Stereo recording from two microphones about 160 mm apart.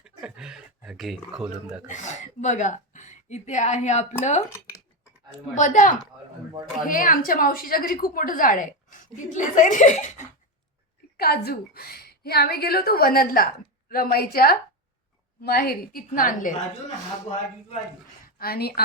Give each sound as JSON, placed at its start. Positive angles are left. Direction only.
{"t": 0.0, "sound": "a sound", "side_deg": -5}
{"t": 1.9, "sound": "a woman's voice", "side_deg": 50}
{"t": 5.5, "sound": "a woman's voice", "side_deg": 50}
{"t": 11.2, "sound": "a woman's voice", "side_deg": 80}
{"t": 18.3, "sound": "speech", "side_deg": 70}